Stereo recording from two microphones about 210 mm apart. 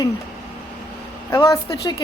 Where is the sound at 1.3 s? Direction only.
15° left (ahead or behind).